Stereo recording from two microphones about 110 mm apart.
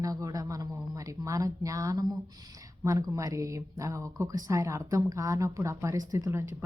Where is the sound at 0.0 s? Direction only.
30° right (ahead or behind).